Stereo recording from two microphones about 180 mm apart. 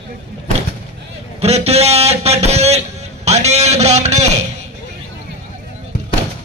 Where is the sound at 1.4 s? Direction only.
35° right (ahead or behind).